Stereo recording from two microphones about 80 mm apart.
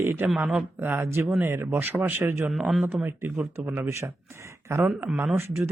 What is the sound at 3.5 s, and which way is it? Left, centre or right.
Speech, right.